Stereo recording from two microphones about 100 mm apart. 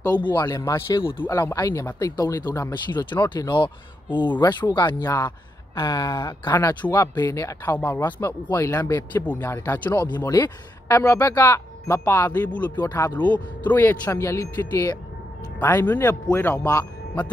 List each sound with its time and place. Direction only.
0.1 s speech: 50° left (ahead or behind)
0.5 s speech: 30° left (ahead or behind)
2.7 s speech: 50° left (ahead or behind)
6.8 s speech: 15° left (ahead or behind)
7.2 s speech: 35° left (ahead or behind)
7.8 s speech: 20° left (ahead or behind)
9.1 s speech: 15° left (ahead or behind)
10.2 s speech: 40° left (ahead or behind)
10.9 s speech: 20° left (ahead or behind)
12.8 s speech: 25° left (ahead or behind)
14.2 s speech: 30° left (ahead or behind)